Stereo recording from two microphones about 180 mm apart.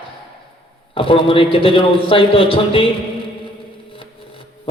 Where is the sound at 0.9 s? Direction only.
30° left (ahead or behind).